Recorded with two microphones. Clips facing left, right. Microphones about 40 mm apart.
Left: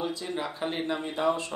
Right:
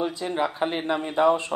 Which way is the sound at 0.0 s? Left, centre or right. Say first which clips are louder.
Right 6 dB; right.